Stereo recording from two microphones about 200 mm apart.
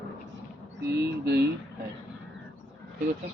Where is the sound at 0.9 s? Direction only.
55° right (ahead or behind).